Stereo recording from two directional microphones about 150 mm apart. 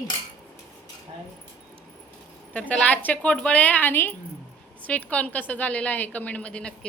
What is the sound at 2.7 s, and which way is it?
A woman's voice, 10° left (ahead or behind).